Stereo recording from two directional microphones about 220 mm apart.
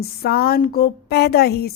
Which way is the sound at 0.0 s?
45° left (ahead or behind).